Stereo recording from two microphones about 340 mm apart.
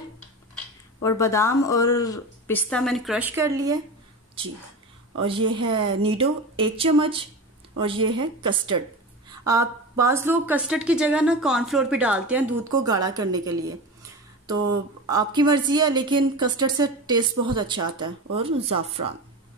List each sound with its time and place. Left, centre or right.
1.0 s a woman's voice: centre
5.2 s a woman's voice: centre
15.0 s a woman's voice: centre